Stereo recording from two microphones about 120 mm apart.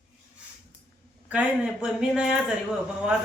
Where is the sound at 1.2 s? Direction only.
10° right (ahead or behind).